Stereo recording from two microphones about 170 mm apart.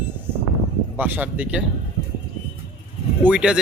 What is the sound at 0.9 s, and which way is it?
Speech, 10° right (ahead or behind).